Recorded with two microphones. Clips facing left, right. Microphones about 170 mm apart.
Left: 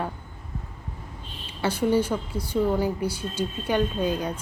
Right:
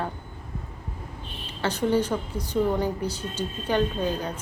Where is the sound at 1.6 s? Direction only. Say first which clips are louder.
Left 1 dB; 10° left (ahead or behind).